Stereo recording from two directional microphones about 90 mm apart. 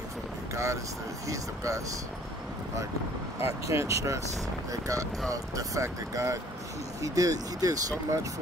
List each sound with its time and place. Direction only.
1.2 s speech: 40° right (ahead or behind)
3.3 s speech: 30° right (ahead or behind)
5.3 s speech: 40° right (ahead or behind)